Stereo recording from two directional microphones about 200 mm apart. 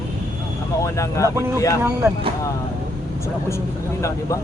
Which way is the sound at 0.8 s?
15° left (ahead or behind).